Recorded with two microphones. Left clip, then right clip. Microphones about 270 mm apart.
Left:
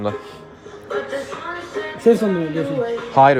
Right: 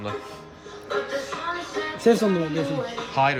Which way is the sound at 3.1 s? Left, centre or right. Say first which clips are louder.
Left 10 dB; centre.